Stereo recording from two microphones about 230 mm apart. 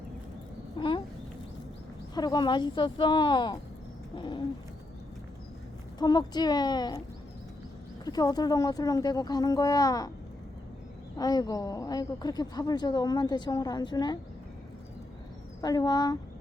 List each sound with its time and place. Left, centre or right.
0.8 s a sound: left
2.1 s speech: centre
6.0 s speech: centre
8.0 s speech: centre
11.2 s speech: centre
15.6 s speech: centre